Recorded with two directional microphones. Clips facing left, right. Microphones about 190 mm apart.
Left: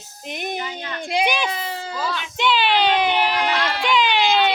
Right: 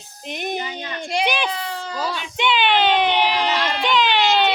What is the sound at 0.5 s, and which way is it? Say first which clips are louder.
Speech: right 1 dB; 15° right (ahead or behind).